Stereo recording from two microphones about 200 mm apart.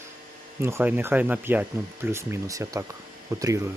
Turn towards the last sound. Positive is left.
turn(degrees=-15)  # may be behind; listen again after turning